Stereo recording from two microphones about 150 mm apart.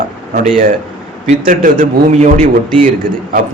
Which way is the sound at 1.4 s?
65° right (ahead or behind).